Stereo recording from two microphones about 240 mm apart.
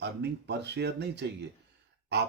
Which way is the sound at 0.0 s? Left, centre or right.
Right.